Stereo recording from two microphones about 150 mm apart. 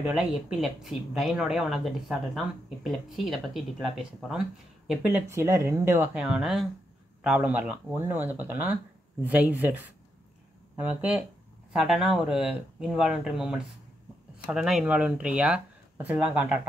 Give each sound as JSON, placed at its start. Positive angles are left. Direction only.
{"t": 0.0, "sound": "speech", "side_deg": -5}
{"t": 6.1, "sound": "speech", "side_deg": -5}